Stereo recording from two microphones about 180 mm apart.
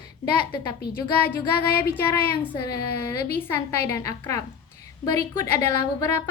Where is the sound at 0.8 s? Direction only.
60° left (ahead or behind).